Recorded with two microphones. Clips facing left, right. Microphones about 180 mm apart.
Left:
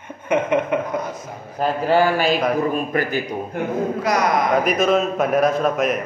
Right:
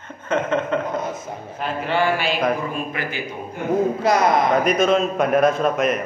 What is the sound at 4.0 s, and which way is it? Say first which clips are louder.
Speech: right 1 dB; 25° right (ahead or behind).